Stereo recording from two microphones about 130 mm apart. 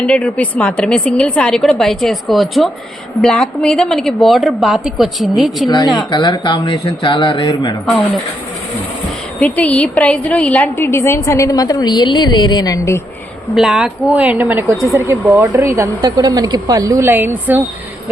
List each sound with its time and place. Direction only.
0.1 s a woman's voice: 10° left (ahead or behind)
5.6 s speech: 35° left (ahead or behind)
9.4 s a woman's voice: 10° left (ahead or behind); by 13.0 s 25° left (ahead or behind)
13.6 s speech: 5° right (ahead or behind)